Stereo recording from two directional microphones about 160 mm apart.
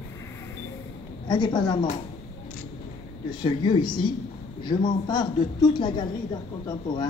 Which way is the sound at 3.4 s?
30° left (ahead or behind).